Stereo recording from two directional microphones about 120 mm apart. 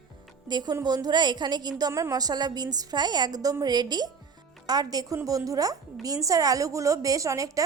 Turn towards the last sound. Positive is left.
turn(degrees=-30)  # may be behind; listen again after turning